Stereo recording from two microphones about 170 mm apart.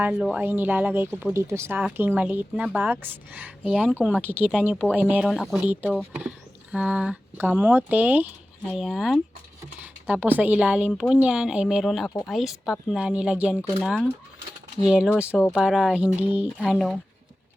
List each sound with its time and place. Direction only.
0.0 s speech: 10° right (ahead or behind)
5.3 s speech: 5° left (ahead or behind)
6.7 s speech: 5° right (ahead or behind)
12.0 s speech: 20° left (ahead or behind)
12.3 s speech: centre (ahead or behind)
13.8 s speech: 5° left (ahead or behind)